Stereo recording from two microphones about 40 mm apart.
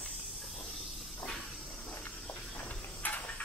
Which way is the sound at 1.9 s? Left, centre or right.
Left.